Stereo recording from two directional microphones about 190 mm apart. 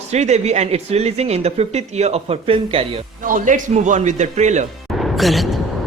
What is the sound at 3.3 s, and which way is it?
A man's voice, 45° right (ahead or behind).